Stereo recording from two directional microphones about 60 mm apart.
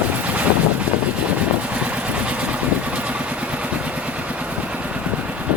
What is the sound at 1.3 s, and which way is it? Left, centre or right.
Vehicle, right.